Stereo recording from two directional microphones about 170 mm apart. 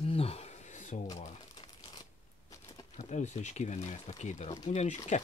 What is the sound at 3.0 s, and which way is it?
Speech, 45° left (ahead or behind).